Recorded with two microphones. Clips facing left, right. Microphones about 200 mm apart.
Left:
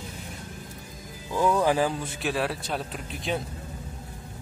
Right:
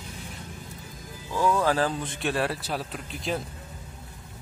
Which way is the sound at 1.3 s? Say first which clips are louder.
Left 1 dB; 15° left (ahead or behind).